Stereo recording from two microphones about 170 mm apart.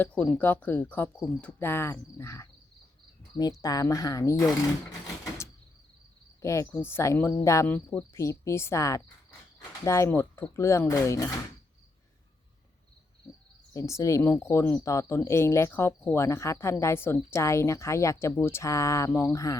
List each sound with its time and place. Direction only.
0.0 s speech: 5° left (ahead or behind)
3.6 s speech: 20° left (ahead or behind)
6.4 s speech: 15° left (ahead or behind)
13.7 s speech: 15° left (ahead or behind)